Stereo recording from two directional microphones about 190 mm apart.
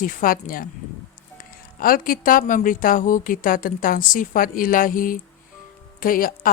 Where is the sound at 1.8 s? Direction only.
50° left (ahead or behind).